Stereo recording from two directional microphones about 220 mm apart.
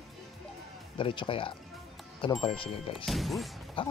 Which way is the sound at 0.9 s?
20° left (ahead or behind).